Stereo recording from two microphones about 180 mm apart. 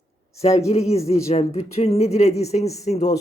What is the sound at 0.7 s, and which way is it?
Speech, 35° left (ahead or behind).